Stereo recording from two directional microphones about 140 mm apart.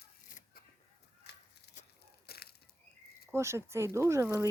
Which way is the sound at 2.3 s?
90° left.